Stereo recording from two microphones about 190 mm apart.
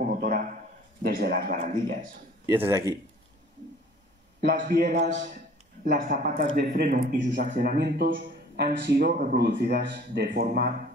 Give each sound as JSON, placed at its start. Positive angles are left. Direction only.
{"t": 0.0, "sound": "a sound", "side_deg": -50}
{"t": 1.0, "sound": "a man's voice", "side_deg": -50}
{"t": 2.4, "sound": "speech", "side_deg": -15}
{"t": 4.4, "sound": "a man's voice", "side_deg": -60}
{"t": 5.1, "sound": "a man's voice", "side_deg": -40}
{"t": 9.2, "sound": "a man's voice", "side_deg": -45}